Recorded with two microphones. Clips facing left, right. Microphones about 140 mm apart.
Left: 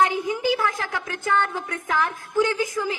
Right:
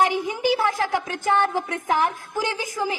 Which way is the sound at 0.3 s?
20° right (ahead or behind).